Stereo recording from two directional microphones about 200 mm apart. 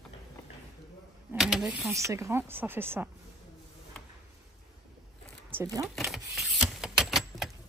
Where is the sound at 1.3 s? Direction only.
Centre (ahead or behind).